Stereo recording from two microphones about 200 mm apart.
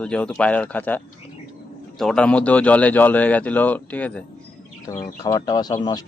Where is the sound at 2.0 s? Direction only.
5° left (ahead or behind).